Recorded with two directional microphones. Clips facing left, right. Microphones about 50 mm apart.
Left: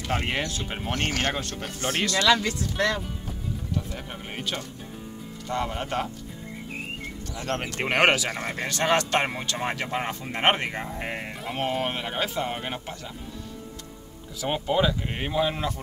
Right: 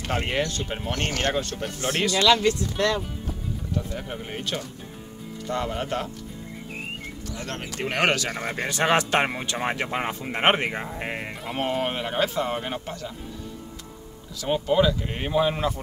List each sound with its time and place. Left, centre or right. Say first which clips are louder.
0.1 s speech: right 2 dB; centre
3.7 s speech: right 4 dB; centre
7.4 s speech: left 4 dB; centre
8.6 s speech: right 2 dB; centre
14.4 s speech: right 3 dB; centre
15.3 s speech: right 3 dB; centre